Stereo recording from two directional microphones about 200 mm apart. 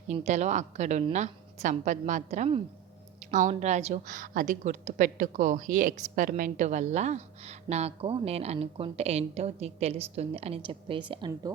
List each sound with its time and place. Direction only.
0.1 s a woman's voice: 35° right (ahead or behind)